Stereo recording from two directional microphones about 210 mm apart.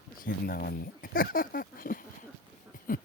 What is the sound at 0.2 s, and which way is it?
Speech, 45° left (ahead or behind).